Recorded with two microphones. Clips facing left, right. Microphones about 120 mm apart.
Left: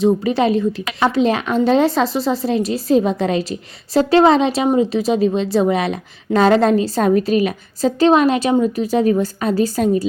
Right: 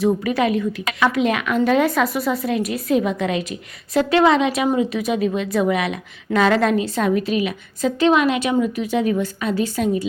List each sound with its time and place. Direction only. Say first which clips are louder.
0.0 s a woman's voice: left 3 dB; 30° left (ahead or behind)